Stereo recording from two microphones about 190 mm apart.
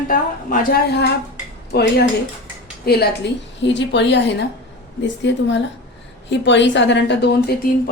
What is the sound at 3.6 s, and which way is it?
A woman's voice, 70° left (ahead or behind).